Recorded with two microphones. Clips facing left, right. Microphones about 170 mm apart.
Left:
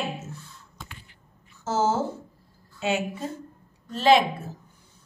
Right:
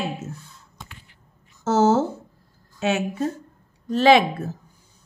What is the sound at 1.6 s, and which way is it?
A woman's voice, 75° right (ahead or behind).